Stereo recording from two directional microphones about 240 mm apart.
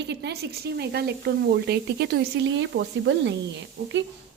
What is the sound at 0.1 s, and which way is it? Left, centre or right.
A woman's voice, right.